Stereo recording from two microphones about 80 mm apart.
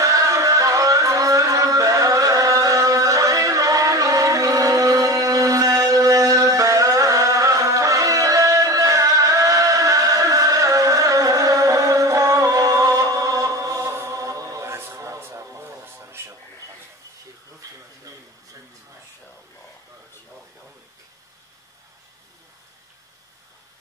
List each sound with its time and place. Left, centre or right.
0.0 s music: right